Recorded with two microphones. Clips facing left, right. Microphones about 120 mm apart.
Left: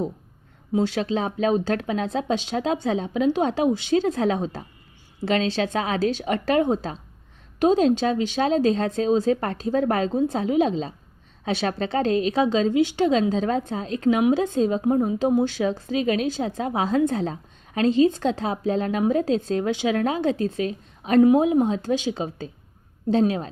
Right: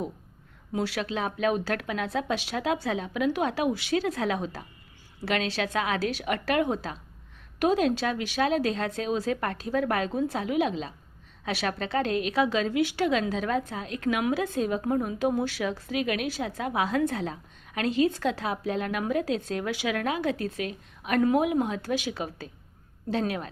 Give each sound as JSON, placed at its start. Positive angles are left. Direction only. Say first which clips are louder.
{"t": 0.7, "sound": "a woman's voice", "louder": "left 7 dB", "side_deg": 25}